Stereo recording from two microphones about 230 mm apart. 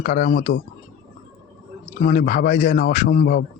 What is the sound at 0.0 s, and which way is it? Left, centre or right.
Speech, left.